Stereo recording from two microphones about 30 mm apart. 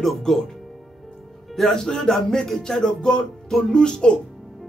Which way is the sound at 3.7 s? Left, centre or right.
Left.